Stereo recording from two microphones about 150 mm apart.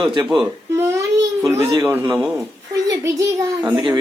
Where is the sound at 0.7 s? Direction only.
20° right (ahead or behind).